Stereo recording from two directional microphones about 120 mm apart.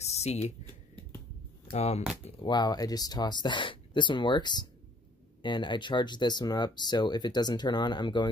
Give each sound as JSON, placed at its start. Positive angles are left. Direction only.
{"t": 0.0, "sound": "a sound", "side_deg": 60}
{"t": 1.7, "sound": "speech", "side_deg": 60}
{"t": 2.4, "sound": "speech", "side_deg": 35}